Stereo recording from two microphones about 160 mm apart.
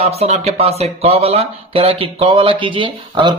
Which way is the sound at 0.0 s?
40° right (ahead or behind).